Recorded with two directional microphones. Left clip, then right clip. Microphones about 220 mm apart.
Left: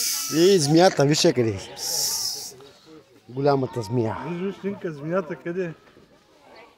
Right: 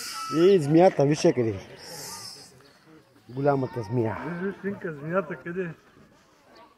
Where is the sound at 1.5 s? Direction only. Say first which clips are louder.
Left 11 dB; 60° left (ahead or behind).